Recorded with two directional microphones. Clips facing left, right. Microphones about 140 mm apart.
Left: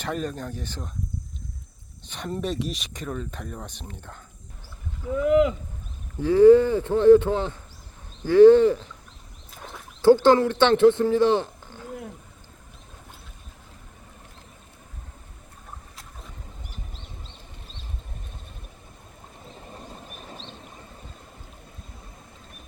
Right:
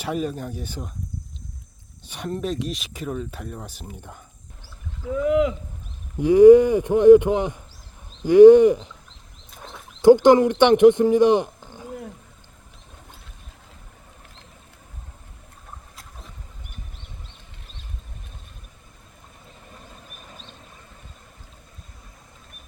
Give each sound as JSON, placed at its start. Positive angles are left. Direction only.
{"t": 0.0, "sound": "speech", "side_deg": -5}
{"t": 2.0, "sound": "speech", "side_deg": -10}
{"t": 2.3, "sound": "speech", "side_deg": 0}
{"t": 6.1, "sound": "speech", "side_deg": -15}
{"t": 10.0, "sound": "speech", "side_deg": -15}
{"t": 11.9, "sound": "a sound", "side_deg": 0}